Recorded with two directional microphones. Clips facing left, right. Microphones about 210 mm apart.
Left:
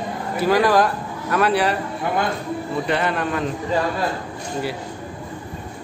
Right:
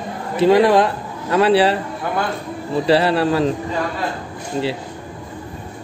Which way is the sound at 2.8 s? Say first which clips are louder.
Right 9 dB; 30° right (ahead or behind).